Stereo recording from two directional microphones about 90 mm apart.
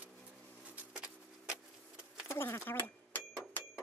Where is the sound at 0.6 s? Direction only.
15° right (ahead or behind).